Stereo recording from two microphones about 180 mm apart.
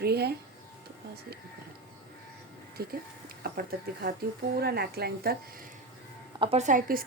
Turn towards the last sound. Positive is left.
turn(degrees=-50)  # may be behind; listen again after turning